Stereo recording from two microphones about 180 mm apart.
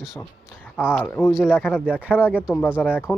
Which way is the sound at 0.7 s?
10° left (ahead or behind).